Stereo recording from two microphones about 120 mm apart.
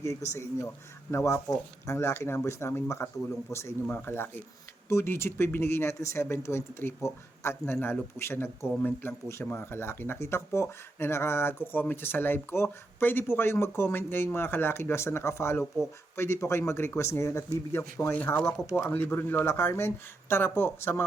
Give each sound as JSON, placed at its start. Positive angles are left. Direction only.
{"t": 0.0, "sound": "speech", "side_deg": 25}